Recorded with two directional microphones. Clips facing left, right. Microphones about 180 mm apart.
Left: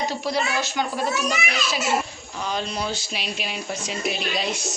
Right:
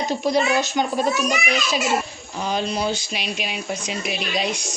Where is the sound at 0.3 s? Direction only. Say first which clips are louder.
Right 8 dB; 20° right (ahead or behind).